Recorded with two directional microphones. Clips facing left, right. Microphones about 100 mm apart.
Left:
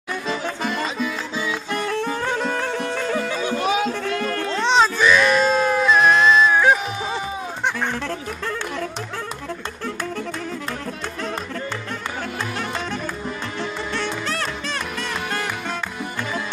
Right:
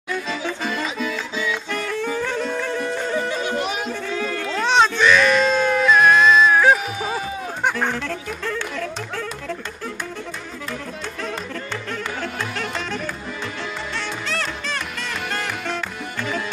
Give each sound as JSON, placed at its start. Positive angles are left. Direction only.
{"t": 2.5, "sound": "music", "side_deg": 80}
{"t": 4.0, "sound": "music", "side_deg": 60}
{"t": 4.5, "sound": "baby cry", "side_deg": 0}
{"t": 5.9, "sound": "music", "side_deg": 5}
{"t": 12.2, "sound": "music", "side_deg": 20}